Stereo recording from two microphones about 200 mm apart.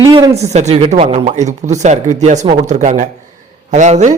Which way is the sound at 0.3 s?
35° right (ahead or behind).